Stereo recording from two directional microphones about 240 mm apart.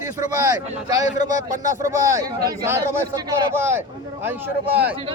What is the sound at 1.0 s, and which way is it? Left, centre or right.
Speech, left.